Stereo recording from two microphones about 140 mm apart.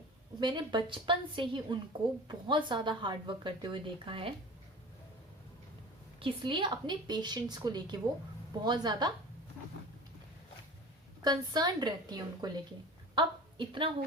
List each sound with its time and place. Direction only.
0.3 s a woman's voice: 35° right (ahead or behind)
6.1 s a woman's voice: 40° right (ahead or behind)
11.2 s a woman's voice: 30° right (ahead or behind)